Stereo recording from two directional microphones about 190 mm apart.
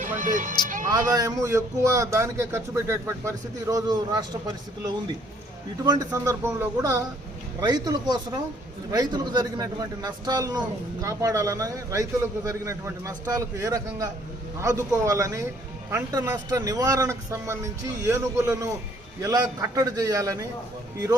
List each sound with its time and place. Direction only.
0.2 s speech: 45° right (ahead or behind)
0.9 s a man's voice: 20° right (ahead or behind)
5.8 s a man's voice: 20° right (ahead or behind)